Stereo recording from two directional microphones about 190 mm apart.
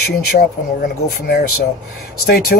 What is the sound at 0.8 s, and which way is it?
Speech, 55° left (ahead or behind).